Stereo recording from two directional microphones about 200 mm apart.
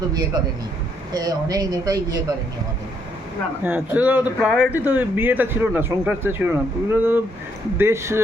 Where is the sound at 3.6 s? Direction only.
10° right (ahead or behind).